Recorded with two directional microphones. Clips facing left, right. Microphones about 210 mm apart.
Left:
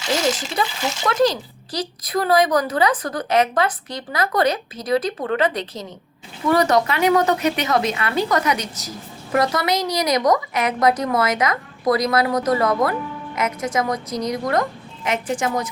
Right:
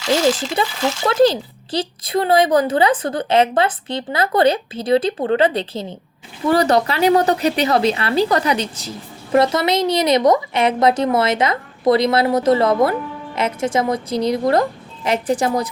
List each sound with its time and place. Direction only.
0.6 s a woman's voice: 25° right (ahead or behind)